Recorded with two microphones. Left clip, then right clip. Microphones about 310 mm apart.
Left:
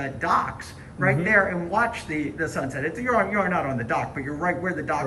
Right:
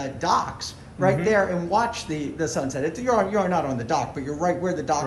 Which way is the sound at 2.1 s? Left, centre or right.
Right.